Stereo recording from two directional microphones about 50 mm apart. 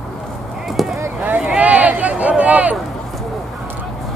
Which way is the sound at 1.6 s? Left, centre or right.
Right.